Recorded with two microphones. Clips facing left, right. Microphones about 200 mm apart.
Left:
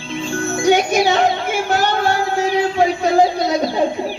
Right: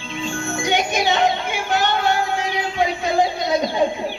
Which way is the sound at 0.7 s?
40° left (ahead or behind).